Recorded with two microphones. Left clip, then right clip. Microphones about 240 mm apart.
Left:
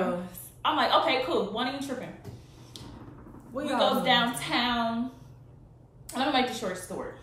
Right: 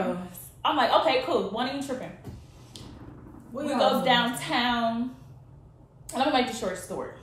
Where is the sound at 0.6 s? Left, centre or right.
Centre.